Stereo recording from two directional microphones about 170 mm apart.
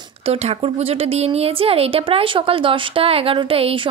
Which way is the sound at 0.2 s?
40° right (ahead or behind).